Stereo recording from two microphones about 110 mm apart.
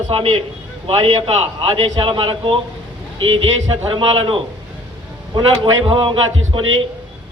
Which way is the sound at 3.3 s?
65° right (ahead or behind).